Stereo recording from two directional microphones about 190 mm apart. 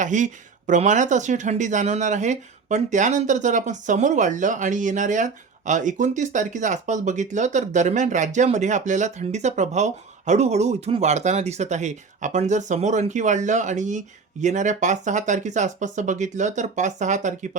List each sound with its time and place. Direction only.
0.0 s speech: 40° right (ahead or behind)